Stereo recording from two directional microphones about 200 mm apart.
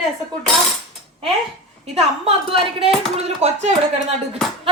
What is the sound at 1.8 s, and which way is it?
A woman's voice, 30° right (ahead or behind).